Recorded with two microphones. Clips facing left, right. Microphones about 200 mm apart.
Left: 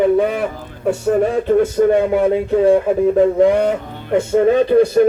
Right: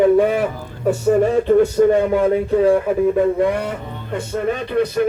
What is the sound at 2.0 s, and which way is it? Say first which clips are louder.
Speech: left 1 dB; 15° left (ahead or behind).